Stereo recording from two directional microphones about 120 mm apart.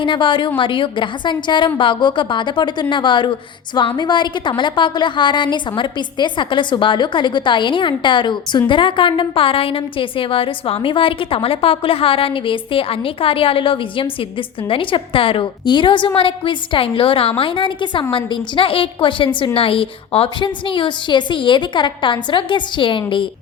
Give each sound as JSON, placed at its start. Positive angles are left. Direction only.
{"t": 0.0, "sound": "a woman's voice", "side_deg": 45}